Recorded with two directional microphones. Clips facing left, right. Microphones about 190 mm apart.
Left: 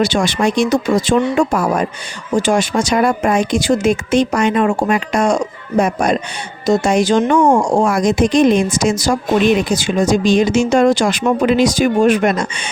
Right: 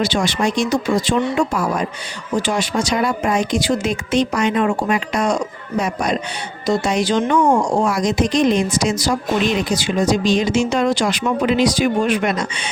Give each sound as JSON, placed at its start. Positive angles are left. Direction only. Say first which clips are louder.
{"t": 0.0, "sound": "speech", "louder": "left 3 dB", "side_deg": 50}